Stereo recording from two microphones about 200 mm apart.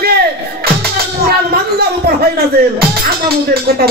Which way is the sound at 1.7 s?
50° right (ahead or behind).